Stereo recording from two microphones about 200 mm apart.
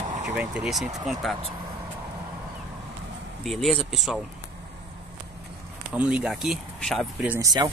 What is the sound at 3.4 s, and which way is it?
Speech, centre (ahead or behind).